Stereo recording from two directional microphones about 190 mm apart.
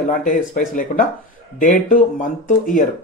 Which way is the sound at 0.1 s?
45° left (ahead or behind).